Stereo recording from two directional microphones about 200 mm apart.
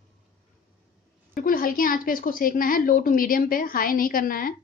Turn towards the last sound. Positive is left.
turn(degrees=45)  # may be behind; listen again after turning